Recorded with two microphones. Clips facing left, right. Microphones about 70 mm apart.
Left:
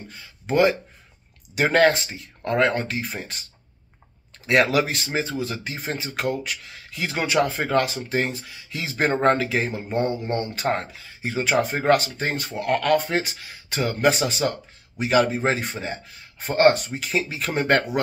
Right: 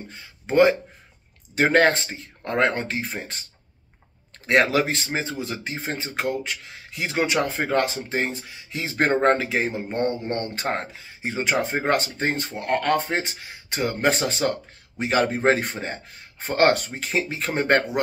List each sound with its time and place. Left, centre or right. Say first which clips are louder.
0.1 s speech: right 1 dB; right
4.5 s speech: even; right
9.9 s speech: left 2 dB; centre
10.5 s speech: left 2 dB; right
14.0 s speech: left 2 dB; right
16.5 s speech: left 2 dB; right
16.9 s speech: even; right